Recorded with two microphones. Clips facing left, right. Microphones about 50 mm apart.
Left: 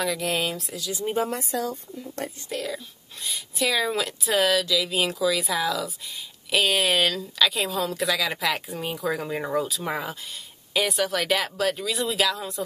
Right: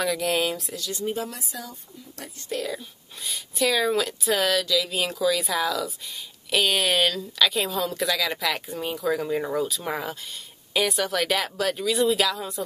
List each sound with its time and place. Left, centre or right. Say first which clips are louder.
0.0 s speech: right 2 dB; centre
1.1 s a woman's voice: left 6 dB; left
1.4 s a woman's voice: left 9 dB; left
2.5 s speech: right 4 dB; centre